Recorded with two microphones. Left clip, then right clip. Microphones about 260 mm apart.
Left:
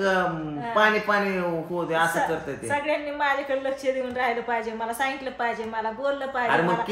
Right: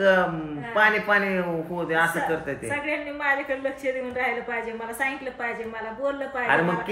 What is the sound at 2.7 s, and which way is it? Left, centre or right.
A woman's voice, centre.